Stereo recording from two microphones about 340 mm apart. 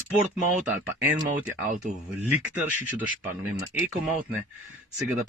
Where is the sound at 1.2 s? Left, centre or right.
Right.